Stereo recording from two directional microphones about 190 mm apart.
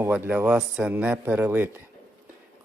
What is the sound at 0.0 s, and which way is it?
Speech, 10° right (ahead or behind).